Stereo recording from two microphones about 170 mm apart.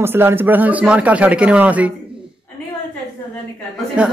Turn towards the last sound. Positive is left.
turn(degrees=-5)  # may be behind; listen again after turning